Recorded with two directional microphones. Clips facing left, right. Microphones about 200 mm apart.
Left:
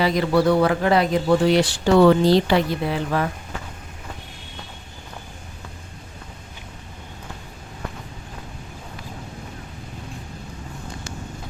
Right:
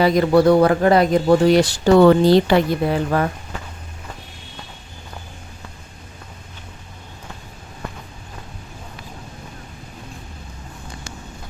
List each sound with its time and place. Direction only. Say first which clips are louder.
0.0 s speech: right 5 dB; 45° right (ahead or behind)